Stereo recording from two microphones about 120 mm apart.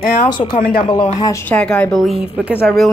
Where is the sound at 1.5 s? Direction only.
10° left (ahead or behind).